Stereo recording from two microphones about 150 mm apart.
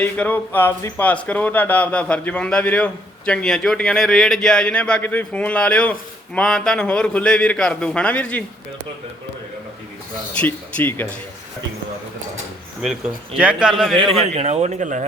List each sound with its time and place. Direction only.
0.0 s speech: 10° left (ahead or behind)
10.3 s speech: 10° left (ahead or behind)
12.8 s speech: 5° right (ahead or behind)
13.9 s a man's voice: 35° right (ahead or behind); by 15.0 s 55° right (ahead or behind)